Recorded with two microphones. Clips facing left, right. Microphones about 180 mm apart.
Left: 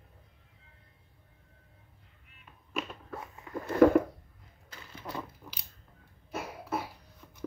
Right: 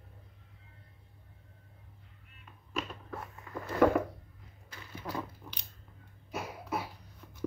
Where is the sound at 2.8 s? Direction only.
Centre (ahead or behind).